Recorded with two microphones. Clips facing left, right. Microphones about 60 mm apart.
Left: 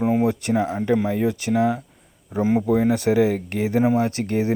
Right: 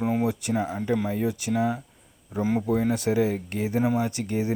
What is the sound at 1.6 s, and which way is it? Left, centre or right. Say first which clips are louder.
Speech: left 5 dB; left.